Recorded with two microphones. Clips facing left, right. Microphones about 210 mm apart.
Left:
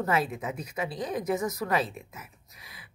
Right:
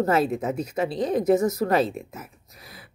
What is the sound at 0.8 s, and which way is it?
Speech, 30° right (ahead or behind).